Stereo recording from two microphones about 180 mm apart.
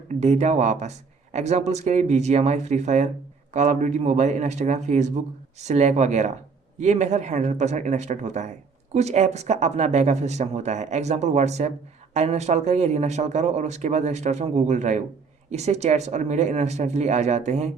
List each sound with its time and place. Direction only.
0.2 s speech: 40° right (ahead or behind)